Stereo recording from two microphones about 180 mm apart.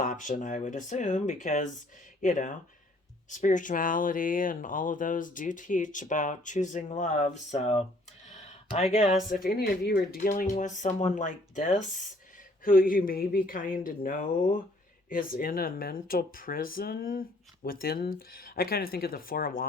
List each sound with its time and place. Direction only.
0.0 s speech: 45° left (ahead or behind)